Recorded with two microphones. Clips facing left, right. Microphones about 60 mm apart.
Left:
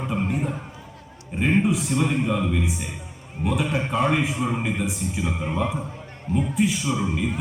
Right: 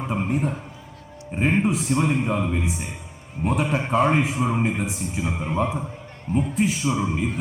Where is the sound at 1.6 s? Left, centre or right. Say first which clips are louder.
Right 1 dB; right.